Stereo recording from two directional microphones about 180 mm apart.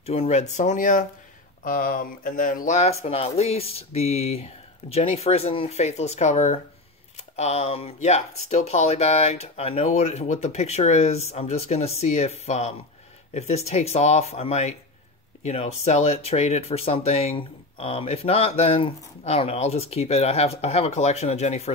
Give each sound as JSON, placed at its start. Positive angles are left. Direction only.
{"t": 0.0, "sound": "speech", "side_deg": 35}